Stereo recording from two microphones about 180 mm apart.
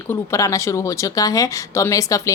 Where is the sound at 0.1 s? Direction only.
15° left (ahead or behind).